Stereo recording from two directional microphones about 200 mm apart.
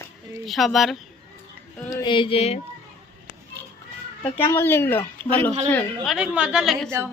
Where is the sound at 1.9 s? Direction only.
20° left (ahead or behind).